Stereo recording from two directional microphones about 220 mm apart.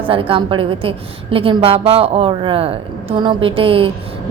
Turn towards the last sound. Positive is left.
turn(degrees=-25)  # may be behind; listen again after turning